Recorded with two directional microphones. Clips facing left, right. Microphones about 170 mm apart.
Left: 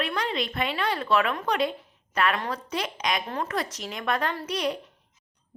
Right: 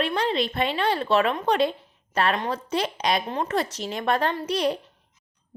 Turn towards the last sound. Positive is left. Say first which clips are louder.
# right 4 dB
turn(degrees=-30)  # may be behind; listen again after turning